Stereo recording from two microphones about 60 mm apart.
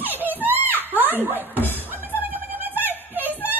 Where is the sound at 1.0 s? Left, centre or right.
Right.